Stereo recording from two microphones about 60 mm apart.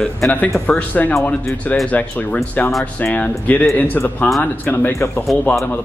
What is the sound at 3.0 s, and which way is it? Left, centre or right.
Speech, left.